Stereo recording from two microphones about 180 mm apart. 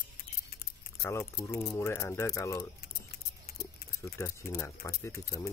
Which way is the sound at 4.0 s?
15° left (ahead or behind).